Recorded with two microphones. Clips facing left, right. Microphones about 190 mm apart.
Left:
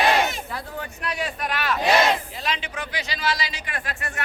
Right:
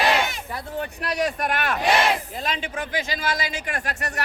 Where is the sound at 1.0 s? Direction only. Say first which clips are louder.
Right 4 dB; 40° right (ahead or behind).